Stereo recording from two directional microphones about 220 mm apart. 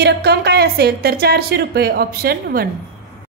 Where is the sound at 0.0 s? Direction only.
50° right (ahead or behind).